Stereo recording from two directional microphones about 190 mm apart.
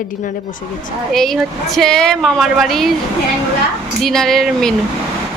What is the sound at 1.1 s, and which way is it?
A woman's voice, centre (ahead or behind).